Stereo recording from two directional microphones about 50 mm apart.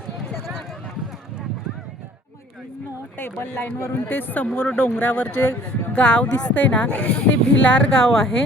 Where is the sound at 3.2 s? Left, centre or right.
Left.